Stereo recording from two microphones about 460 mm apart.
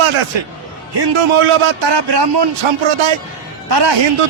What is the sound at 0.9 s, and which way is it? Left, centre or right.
A man's voice, right.